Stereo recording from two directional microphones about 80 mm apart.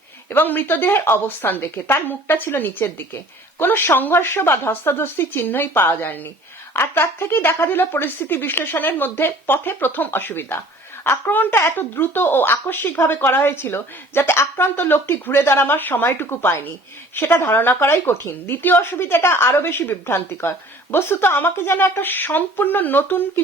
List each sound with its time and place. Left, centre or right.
0.3 s speech: left